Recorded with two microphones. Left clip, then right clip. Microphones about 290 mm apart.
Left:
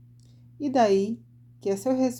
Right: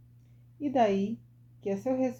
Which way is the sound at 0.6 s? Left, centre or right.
Left.